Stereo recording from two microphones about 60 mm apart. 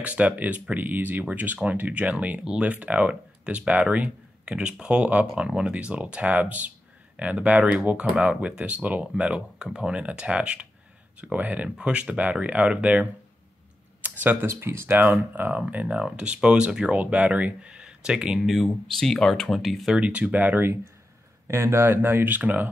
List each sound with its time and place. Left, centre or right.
0.0 s speech: right
2.4 s speech: centre
14.0 s a sound: right
14.4 s speech: right
15.3 s speech: right; by 18.4 s centre
18.4 s speech: centre
18.7 s speech: centre
20.0 s speech: right
21.5 s speech: right